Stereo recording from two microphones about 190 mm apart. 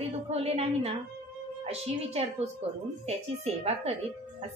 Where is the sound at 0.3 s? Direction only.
35° right (ahead or behind).